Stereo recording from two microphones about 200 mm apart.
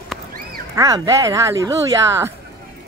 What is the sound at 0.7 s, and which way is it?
Speech, 15° right (ahead or behind).